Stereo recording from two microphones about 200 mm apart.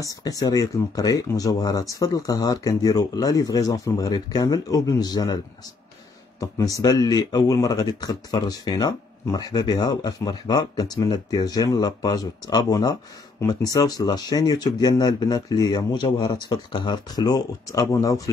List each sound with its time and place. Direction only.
0.0 s speech: 20° left (ahead or behind)
6.8 s speech: 20° left (ahead or behind)